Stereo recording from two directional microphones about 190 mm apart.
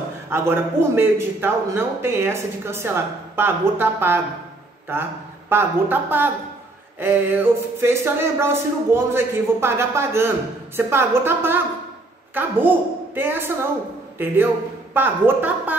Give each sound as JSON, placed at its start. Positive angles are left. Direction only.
{"t": 0.3, "sound": "a man's voice", "side_deg": -15}
{"t": 5.5, "sound": "a man's voice", "side_deg": -10}